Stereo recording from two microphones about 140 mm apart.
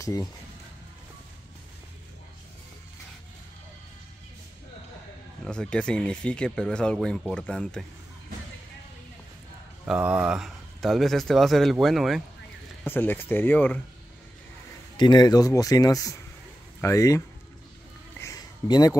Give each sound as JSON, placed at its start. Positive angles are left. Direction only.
{"t": 0.0, "sound": "speech", "side_deg": 25}
{"t": 5.4, "sound": "speech", "side_deg": 5}
{"t": 9.8, "sound": "speech", "side_deg": -10}
{"t": 12.8, "sound": "speech", "side_deg": 15}
{"t": 15.0, "sound": "speech", "side_deg": 30}
{"t": 18.2, "sound": "a sound", "side_deg": 25}